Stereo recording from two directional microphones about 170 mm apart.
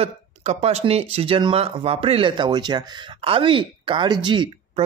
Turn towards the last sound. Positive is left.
turn(degrees=-30)  # may be behind; listen again after turning